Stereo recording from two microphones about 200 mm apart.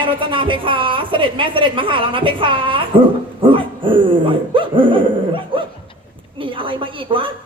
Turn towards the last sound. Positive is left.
turn(degrees=-25)  # may be behind; listen again after turning